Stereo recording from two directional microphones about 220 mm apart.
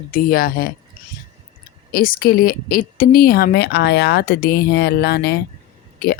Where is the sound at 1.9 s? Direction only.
40° left (ahead or behind).